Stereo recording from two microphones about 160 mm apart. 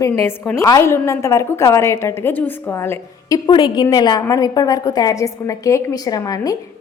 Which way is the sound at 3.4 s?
30° left (ahead or behind).